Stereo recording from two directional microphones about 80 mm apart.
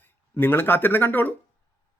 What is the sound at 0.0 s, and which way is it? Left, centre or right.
Speech, left.